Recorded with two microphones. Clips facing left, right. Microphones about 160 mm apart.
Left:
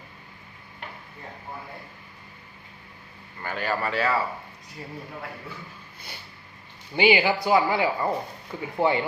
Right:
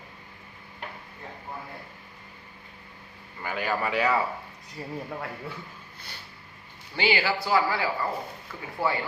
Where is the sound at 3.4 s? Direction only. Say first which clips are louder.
Left 1 dB; 10° right (ahead or behind).